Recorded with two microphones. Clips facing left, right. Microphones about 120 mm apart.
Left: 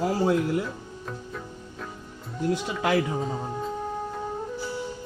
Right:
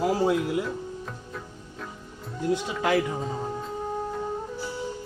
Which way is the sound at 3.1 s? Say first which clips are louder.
Left 1 dB; centre (ahead or behind).